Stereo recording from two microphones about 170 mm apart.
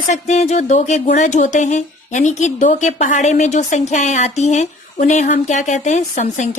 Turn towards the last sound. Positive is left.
turn(degrees=45)  # may be behind; listen again after turning